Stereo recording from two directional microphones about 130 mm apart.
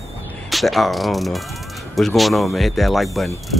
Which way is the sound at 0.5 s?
Centre (ahead or behind).